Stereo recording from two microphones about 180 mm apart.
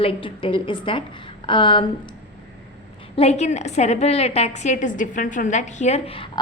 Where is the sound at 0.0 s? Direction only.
30° left (ahead or behind).